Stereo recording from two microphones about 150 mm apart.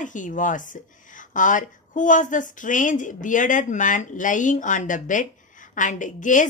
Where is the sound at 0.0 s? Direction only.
60° left (ahead or behind).